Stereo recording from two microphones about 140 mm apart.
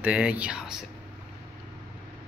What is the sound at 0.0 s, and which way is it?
Speech, 10° right (ahead or behind).